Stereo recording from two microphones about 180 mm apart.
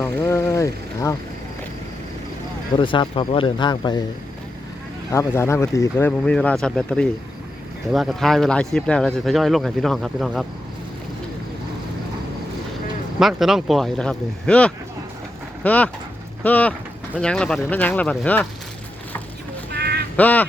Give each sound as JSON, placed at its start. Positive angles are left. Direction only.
{"t": 0.0, "sound": "speech", "side_deg": 15}
{"t": 2.7, "sound": "speech", "side_deg": 25}
{"t": 5.1, "sound": "speech", "side_deg": 15}
{"t": 13.1, "sound": "speech", "side_deg": 0}
{"t": 19.7, "sound": "a sound", "side_deg": -60}
{"t": 20.1, "sound": "speech", "side_deg": 10}